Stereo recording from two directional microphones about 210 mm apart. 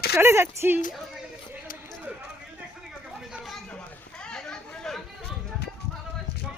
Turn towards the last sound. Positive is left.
turn(degrees=5)  # may be behind; listen again after turning